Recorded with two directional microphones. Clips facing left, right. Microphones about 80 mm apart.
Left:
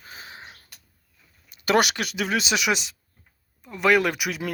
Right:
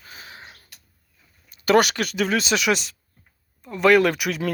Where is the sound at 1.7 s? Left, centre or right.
Centre.